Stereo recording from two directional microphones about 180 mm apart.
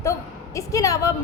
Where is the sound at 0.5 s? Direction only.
20° left (ahead or behind).